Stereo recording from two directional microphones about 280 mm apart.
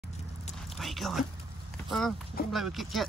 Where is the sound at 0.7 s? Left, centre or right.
Centre.